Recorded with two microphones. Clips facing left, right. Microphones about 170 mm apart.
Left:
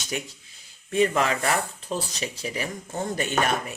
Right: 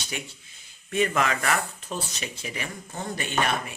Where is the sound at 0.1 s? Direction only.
40° left (ahead or behind).